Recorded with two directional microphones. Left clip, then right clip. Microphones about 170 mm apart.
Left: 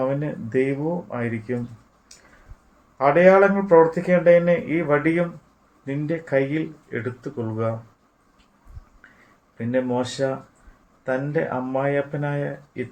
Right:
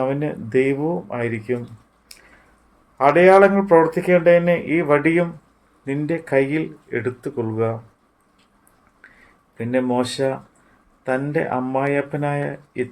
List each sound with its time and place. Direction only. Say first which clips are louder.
0.0 s speech: right 2 dB; 55° right (ahead or behind)
3.0 s speech: right 3 dB; 60° right (ahead or behind)
9.6 s speech: right 3 dB; 55° right (ahead or behind)